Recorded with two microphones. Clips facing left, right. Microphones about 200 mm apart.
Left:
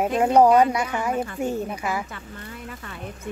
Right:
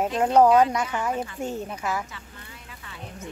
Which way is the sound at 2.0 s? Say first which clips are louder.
Left 7 dB; 55° left (ahead or behind).